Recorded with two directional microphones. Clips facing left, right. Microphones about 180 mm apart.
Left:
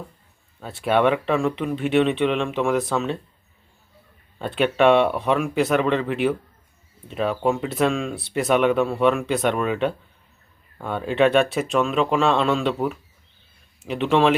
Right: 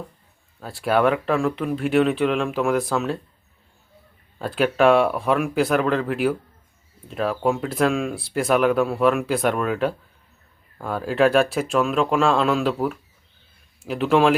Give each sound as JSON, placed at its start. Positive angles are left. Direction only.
{"t": 0.6, "sound": "speech", "side_deg": 0}
{"t": 4.4, "sound": "speech", "side_deg": 0}